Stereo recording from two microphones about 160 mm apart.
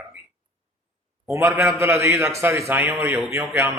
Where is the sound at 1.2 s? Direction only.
15° right (ahead or behind).